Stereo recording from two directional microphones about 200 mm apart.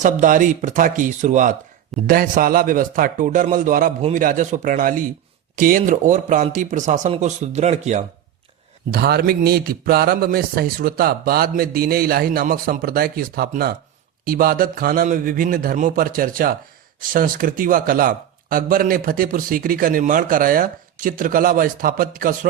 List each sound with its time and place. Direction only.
0.0 s a man's voice: 40° right (ahead or behind)
8.9 s a man's voice: 50° right (ahead or behind)